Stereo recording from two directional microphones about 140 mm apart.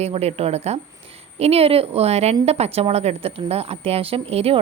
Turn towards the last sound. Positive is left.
turn(degrees=-45)  # may be behind; listen again after turning